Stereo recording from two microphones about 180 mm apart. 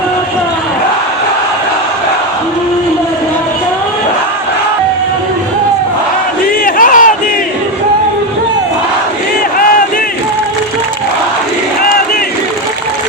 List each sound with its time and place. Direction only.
6.7 s crowd: 50° left (ahead or behind)